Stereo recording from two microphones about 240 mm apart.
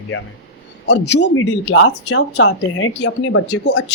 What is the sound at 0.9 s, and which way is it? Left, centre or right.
Speech, left.